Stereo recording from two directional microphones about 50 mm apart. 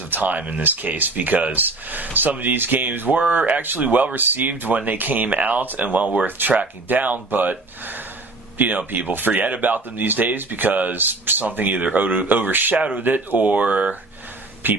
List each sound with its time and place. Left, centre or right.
0.1 s speech: right
8.5 s speech: right
14.6 s speech: right